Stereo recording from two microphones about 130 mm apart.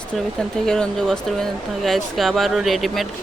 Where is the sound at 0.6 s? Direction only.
5° left (ahead or behind).